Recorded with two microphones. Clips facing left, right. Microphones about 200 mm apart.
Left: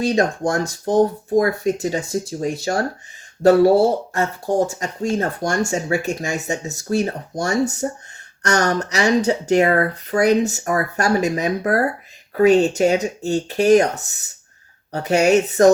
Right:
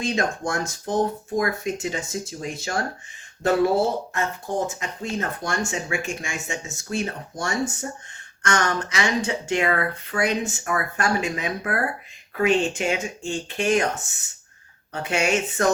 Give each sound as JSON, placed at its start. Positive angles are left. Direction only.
{"t": 0.0, "sound": "speech", "side_deg": 35}